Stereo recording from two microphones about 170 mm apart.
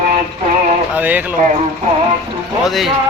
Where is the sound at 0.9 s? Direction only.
10° right (ahead or behind).